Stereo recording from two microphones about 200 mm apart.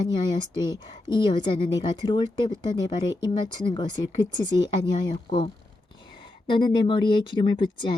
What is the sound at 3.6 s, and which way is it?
Speech, 25° left (ahead or behind).